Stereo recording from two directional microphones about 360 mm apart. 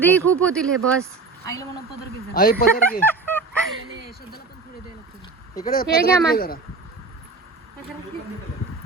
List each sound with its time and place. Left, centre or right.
0.0 s speech: centre
2.3 s speech: left
3.0 s fowl: centre
5.5 s speech: left